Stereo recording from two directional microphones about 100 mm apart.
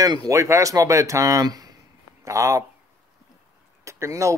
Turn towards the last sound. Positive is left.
turn(degrees=-30)  # may be behind; listen again after turning